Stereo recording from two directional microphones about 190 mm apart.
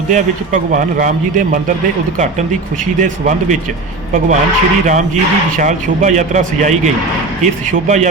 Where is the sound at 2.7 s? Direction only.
40° right (ahead or behind).